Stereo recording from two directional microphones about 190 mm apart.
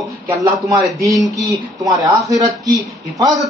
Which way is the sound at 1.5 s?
20° right (ahead or behind).